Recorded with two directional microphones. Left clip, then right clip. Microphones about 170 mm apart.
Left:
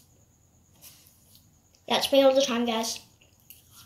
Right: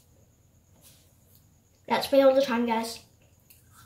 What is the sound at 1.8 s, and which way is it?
A woman's voice, 15° right (ahead or behind).